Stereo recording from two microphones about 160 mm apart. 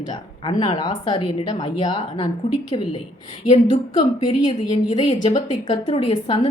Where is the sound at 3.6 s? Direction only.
30° left (ahead or behind).